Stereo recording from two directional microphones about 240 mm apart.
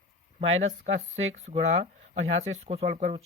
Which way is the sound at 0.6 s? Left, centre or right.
Right.